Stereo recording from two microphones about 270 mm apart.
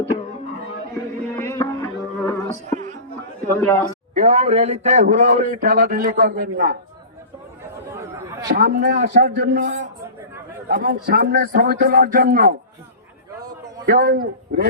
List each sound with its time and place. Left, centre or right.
1.4 s a sound: centre
2.7 s a sound: right
3.5 s speech: centre
4.1 s a man's voice: right
8.4 s a man's voice: right
13.8 s a man's voice: right